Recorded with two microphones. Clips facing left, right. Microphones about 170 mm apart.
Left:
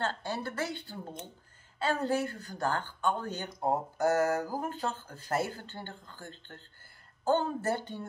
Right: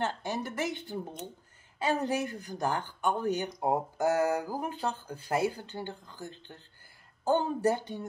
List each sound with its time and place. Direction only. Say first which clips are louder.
0.0 s speech: right 1 dB; 15° right (ahead or behind)